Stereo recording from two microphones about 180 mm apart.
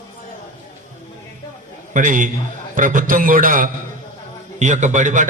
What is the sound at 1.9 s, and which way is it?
A man's voice, 45° right (ahead or behind).